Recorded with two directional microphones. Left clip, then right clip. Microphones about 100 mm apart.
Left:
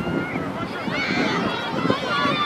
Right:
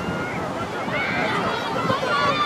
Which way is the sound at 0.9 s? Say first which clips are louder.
Even; 45° left (ahead or behind).